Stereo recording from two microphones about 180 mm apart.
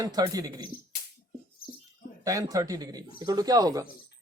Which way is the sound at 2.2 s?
20° right (ahead or behind).